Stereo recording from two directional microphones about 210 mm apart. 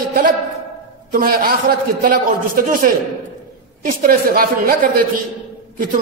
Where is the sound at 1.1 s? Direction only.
45° right (ahead or behind).